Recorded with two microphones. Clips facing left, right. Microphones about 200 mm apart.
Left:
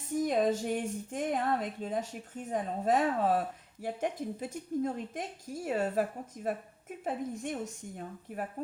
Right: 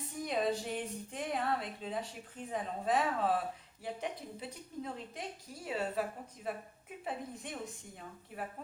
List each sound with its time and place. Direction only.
0.1 s speech: 45° left (ahead or behind)